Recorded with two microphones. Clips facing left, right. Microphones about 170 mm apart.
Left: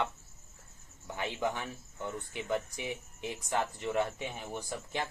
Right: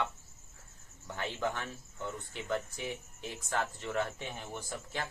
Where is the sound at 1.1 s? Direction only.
15° left (ahead or behind).